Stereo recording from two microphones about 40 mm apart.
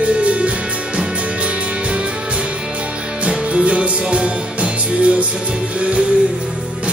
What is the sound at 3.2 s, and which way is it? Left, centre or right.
Music, right.